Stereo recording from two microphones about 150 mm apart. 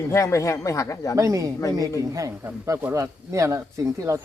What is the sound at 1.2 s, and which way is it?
Speech, 20° right (ahead or behind).